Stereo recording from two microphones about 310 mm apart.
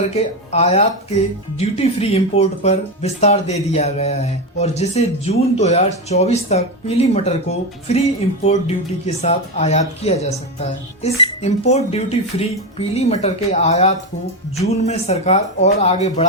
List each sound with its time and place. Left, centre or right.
0.5 s speech: centre